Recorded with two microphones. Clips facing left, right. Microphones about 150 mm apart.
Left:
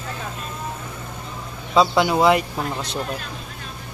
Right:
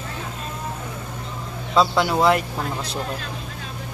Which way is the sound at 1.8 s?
Centre (ahead or behind).